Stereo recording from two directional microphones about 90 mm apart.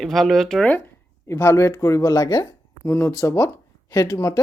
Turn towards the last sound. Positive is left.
turn(degrees=35)  # may be behind; listen again after turning